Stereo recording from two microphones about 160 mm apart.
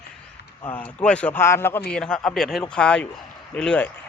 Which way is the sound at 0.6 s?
10° left (ahead or behind).